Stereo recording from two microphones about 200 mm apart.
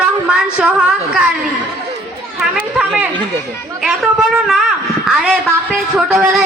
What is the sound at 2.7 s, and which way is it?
A woman's voice, 5° right (ahead or behind).